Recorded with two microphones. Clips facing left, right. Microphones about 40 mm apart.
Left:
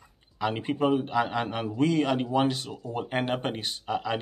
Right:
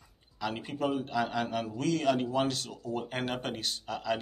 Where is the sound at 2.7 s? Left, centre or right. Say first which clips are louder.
Left 4 dB; left.